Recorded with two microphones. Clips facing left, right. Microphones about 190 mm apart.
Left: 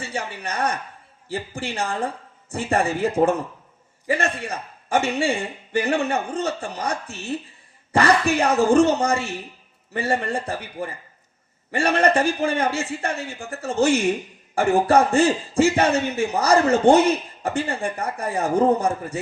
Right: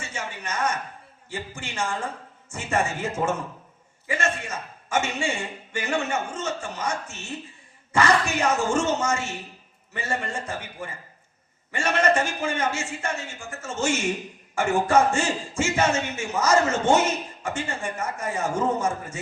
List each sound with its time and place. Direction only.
0.0 s a man's voice: 35° left (ahead or behind)